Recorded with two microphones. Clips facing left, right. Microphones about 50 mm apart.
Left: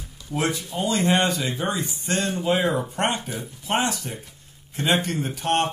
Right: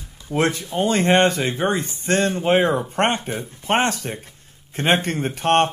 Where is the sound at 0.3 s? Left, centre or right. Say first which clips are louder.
Right 5 dB; right.